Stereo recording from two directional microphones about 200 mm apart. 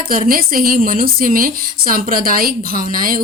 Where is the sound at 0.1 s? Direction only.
45° right (ahead or behind).